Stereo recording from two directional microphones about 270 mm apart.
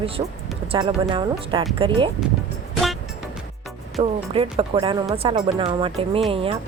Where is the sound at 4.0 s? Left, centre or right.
Right.